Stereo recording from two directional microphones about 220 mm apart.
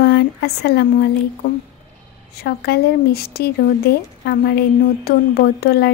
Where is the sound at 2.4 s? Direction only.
45° left (ahead or behind).